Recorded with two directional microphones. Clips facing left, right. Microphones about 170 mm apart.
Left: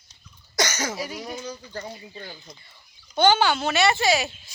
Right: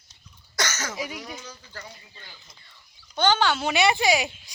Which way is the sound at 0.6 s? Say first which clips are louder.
Left 4 dB; 15° left (ahead or behind).